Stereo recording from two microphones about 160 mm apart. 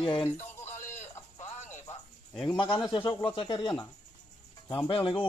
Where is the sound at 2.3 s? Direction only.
5° left (ahead or behind).